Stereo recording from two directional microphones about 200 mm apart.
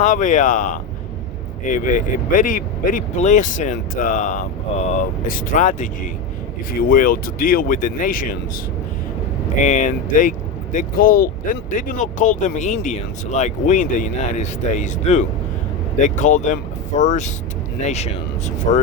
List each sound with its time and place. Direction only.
0.0 s speech: 40° left (ahead or behind)
9.6 s speech: 35° left (ahead or behind)